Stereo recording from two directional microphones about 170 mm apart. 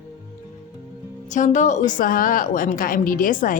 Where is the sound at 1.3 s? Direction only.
45° left (ahead or behind).